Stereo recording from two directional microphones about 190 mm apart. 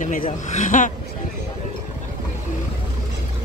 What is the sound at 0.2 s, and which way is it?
Speech, 40° left (ahead or behind).